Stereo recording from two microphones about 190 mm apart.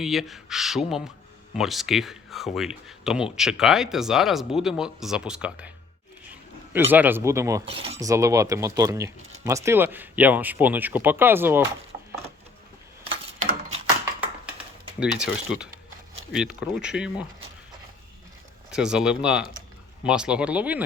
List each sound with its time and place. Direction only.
0.0 s speech: centre (ahead or behind)
6.7 s speech: 10° right (ahead or behind)
15.0 s speech: 5° right (ahead or behind)
18.7 s speech: 5° right (ahead or behind)